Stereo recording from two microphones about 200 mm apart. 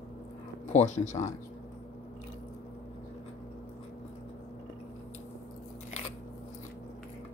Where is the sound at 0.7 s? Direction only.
35° left (ahead or behind).